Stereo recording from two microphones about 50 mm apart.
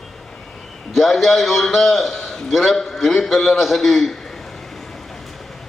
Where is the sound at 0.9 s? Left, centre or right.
Centre.